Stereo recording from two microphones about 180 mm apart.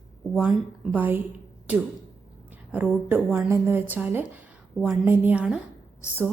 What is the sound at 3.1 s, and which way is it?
A woman's voice, 10° right (ahead or behind).